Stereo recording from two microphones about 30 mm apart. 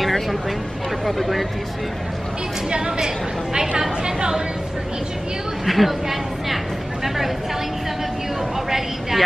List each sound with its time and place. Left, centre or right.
0.0 s a sound: centre
1.0 s speech: centre
2.7 s a woman's voice: right
5.7 s speech: centre
8.6 s a woman's voice: centre